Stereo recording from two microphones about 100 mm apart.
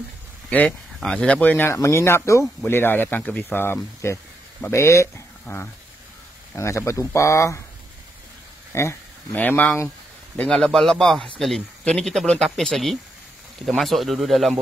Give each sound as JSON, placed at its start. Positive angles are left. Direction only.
{"t": 0.5, "sound": "speech", "side_deg": 10}
{"t": 1.7, "sound": "speech", "side_deg": 25}
{"t": 8.7, "sound": "speech", "side_deg": 20}
{"t": 10.5, "sound": "speech", "side_deg": 5}